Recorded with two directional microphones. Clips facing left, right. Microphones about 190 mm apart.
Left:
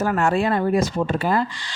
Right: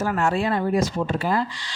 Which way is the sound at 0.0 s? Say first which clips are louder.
Left 3 dB; 55° left (ahead or behind).